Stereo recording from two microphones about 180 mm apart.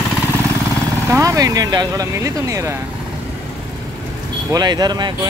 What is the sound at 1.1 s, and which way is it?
Speech, 20° right (ahead or behind).